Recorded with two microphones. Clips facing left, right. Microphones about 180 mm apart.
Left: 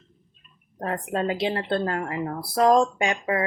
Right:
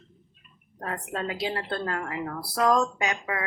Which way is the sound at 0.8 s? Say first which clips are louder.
Left 6 dB; 30° left (ahead or behind).